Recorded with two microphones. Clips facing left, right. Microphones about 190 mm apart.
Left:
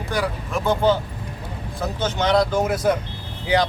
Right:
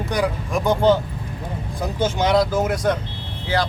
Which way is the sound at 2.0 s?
10° right (ahead or behind).